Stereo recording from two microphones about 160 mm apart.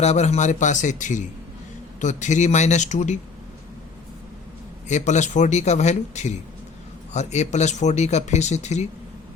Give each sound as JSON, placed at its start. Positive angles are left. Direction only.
{"t": 0.0, "sound": "speech", "side_deg": 45}
{"t": 4.9, "sound": "speech", "side_deg": 50}